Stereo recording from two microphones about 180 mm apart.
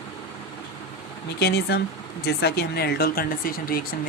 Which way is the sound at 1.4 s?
65° left (ahead or behind).